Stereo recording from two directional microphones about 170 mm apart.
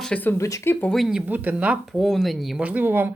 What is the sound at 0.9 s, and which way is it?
Speech, centre (ahead or behind).